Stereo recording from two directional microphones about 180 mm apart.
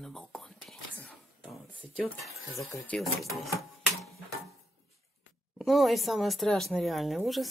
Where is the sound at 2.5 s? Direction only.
5° left (ahead or behind).